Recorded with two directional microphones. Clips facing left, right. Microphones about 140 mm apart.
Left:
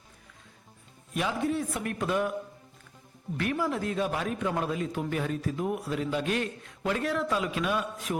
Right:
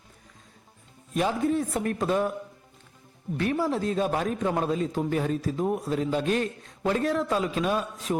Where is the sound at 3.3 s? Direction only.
30° right (ahead or behind).